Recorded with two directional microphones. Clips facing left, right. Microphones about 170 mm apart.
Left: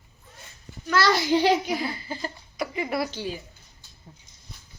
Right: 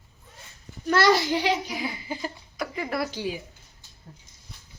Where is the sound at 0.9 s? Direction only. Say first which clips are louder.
Right 2 dB; 25° right (ahead or behind).